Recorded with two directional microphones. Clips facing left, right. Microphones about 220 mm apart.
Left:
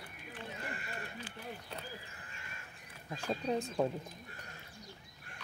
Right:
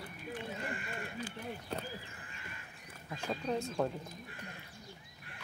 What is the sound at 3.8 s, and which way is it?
Speech, 10° left (ahead or behind).